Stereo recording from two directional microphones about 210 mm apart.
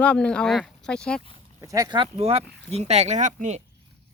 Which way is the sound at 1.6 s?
15° right (ahead or behind).